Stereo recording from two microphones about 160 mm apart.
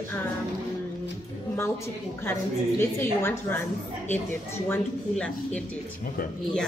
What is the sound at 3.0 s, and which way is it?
Speech, 15° left (ahead or behind).